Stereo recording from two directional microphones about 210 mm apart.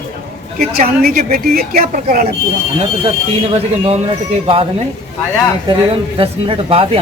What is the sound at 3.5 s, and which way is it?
Speech, 30° right (ahead or behind).